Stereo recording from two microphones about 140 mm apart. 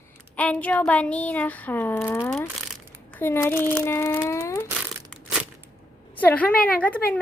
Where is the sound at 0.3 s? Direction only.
10° left (ahead or behind).